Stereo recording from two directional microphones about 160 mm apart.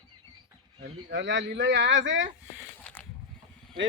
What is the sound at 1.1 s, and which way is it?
Speech, 90° right.